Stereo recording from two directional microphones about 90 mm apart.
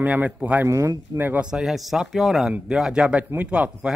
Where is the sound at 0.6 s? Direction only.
35° right (ahead or behind).